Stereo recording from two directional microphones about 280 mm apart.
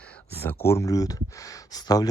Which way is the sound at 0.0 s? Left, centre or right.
Centre.